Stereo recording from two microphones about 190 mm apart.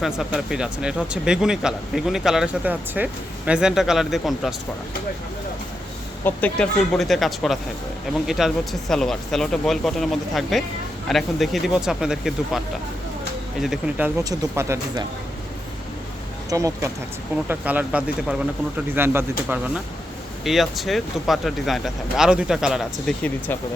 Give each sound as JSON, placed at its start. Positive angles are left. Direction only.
{"t": 0.0, "sound": "speech", "side_deg": 0}
{"t": 6.2, "sound": "speech", "side_deg": 5}
{"t": 14.3, "sound": "speech", "side_deg": -15}
{"t": 16.5, "sound": "speech", "side_deg": -15}
{"t": 20.4, "sound": "speech", "side_deg": 0}